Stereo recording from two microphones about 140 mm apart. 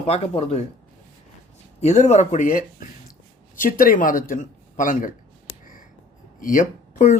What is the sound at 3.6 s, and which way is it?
Speech, 85° left.